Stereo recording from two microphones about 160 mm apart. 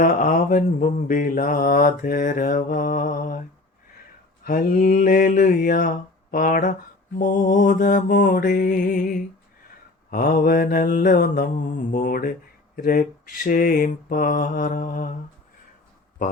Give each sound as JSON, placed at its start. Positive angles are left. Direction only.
{"t": 0.0, "sound": "mantra", "side_deg": 60}
{"t": 4.4, "sound": "mantra", "side_deg": 60}
{"t": 10.1, "sound": "mantra", "side_deg": 60}